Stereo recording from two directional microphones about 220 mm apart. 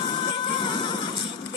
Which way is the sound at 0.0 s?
20° left (ahead or behind).